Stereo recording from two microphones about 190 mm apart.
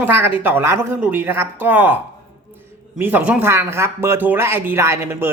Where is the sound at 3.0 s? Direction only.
10° right (ahead or behind).